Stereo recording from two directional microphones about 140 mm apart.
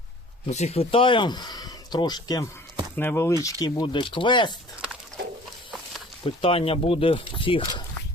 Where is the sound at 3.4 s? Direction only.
30° left (ahead or behind).